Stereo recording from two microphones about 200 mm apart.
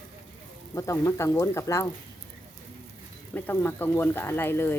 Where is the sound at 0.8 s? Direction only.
15° left (ahead or behind).